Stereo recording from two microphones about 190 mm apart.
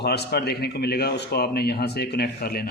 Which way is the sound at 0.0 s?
55° left (ahead or behind).